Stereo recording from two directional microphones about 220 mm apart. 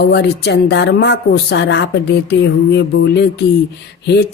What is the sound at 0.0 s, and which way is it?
Speech, 50° left (ahead or behind).